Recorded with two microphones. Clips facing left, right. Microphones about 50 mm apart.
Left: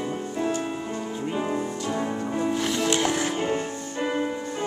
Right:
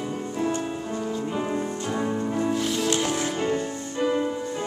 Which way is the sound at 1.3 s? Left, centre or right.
Centre.